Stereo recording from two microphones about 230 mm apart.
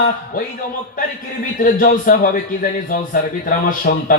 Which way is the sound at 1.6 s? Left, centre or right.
Left.